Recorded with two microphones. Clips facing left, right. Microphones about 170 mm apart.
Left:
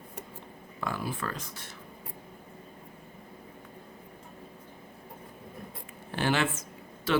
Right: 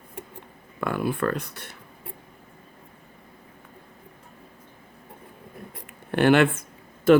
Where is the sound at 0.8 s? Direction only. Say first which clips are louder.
Right 8 dB; 60° right (ahead or behind).